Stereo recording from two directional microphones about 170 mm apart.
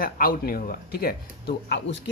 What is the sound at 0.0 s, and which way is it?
Speech, 60° left (ahead or behind).